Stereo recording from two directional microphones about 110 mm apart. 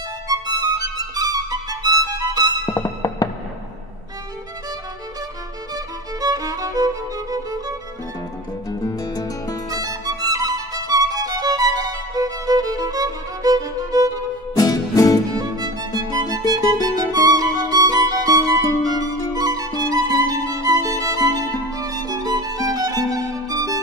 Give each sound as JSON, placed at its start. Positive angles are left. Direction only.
{"t": 0.3, "sound": "music", "side_deg": -35}
{"t": 2.7, "sound": "music", "side_deg": 30}
{"t": 6.2, "sound": "music", "side_deg": -35}
{"t": 8.6, "sound": "music", "side_deg": 35}
{"t": 9.7, "sound": "music", "side_deg": -35}
{"t": 14.5, "sound": "music", "side_deg": 35}
{"t": 15.3, "sound": "music", "side_deg": -35}
{"t": 16.8, "sound": "music", "side_deg": -35}